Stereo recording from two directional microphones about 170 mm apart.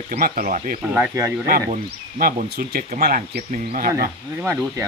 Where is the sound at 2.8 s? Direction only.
55° right (ahead or behind).